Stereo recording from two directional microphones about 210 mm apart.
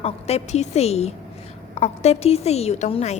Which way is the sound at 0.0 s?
30° left (ahead or behind).